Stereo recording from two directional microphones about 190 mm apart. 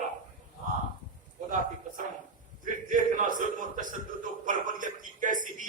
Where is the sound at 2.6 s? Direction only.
45° right (ahead or behind).